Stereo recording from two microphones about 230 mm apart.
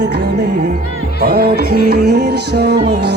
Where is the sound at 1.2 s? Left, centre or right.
Right.